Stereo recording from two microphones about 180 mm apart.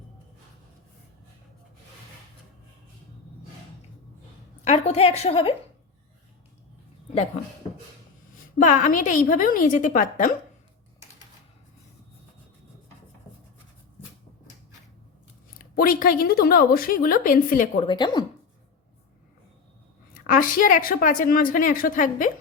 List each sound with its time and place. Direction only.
4.6 s a woman's voice: 35° left (ahead or behind)
8.5 s a woman's voice: 45° left (ahead or behind)
15.5 s a woman's voice: 50° left (ahead or behind)
17.8 s speech: 25° left (ahead or behind)
20.2 s a woman's voice: 50° left (ahead or behind)